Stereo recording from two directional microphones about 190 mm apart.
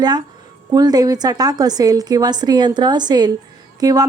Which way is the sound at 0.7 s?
20° right (ahead or behind).